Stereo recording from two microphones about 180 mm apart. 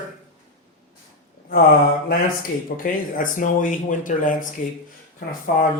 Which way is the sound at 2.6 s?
50° left (ahead or behind).